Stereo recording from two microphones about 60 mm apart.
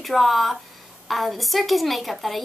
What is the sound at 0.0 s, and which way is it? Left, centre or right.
A woman's voice, centre.